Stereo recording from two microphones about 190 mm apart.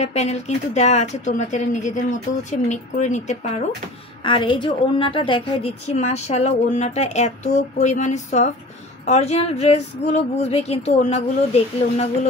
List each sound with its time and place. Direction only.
0.0 s a woman's voice: 35° left (ahead or behind)
4.2 s a woman's voice: 25° left (ahead or behind)